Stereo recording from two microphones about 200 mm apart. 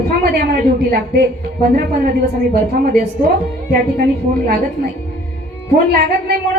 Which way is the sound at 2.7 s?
50° right (ahead or behind).